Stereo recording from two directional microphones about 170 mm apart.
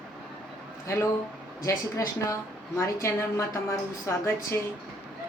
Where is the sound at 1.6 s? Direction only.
15° left (ahead or behind).